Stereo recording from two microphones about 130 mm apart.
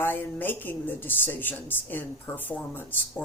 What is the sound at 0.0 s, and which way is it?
A woman's voice, 15° left (ahead or behind).